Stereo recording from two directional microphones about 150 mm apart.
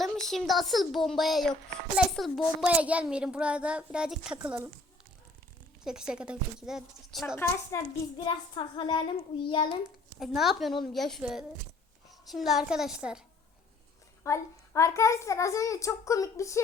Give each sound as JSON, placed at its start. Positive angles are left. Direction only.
{"t": 0.0, "sound": "a child's voice", "side_deg": 0}
{"t": 5.8, "sound": "a woman's voice", "side_deg": -5}
{"t": 7.7, "sound": "a child's voice", "side_deg": 15}
{"t": 8.2, "sound": "child singing", "side_deg": 35}
{"t": 10.2, "sound": "a woman's voice", "side_deg": 0}
{"t": 14.3, "sound": "a child's voice", "side_deg": 20}